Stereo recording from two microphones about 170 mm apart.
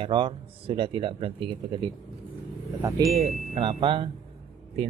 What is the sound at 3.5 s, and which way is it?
Speech, 35° right (ahead or behind).